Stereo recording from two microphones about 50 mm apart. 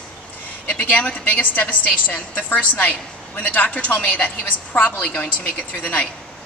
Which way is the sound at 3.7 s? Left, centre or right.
Left.